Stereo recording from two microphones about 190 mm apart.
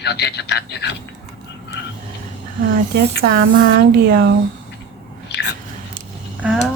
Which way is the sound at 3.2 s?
50° right (ahead or behind).